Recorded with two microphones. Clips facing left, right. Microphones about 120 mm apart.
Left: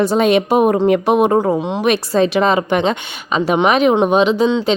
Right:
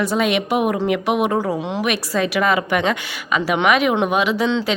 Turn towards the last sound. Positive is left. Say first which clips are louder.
# left 5 dB
turn(degrees=20)  # may be behind; listen again after turning